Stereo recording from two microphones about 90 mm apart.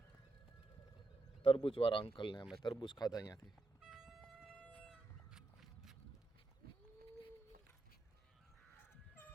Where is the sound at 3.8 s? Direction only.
5° right (ahead or behind).